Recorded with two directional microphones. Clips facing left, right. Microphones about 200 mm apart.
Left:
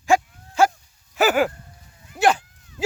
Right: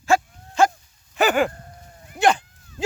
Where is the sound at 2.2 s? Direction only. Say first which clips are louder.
Even; 5° left (ahead or behind).